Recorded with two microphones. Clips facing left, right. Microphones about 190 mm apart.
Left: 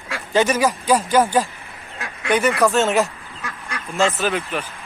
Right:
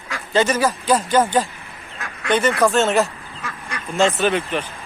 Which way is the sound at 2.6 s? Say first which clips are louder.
Even; 10° left (ahead or behind).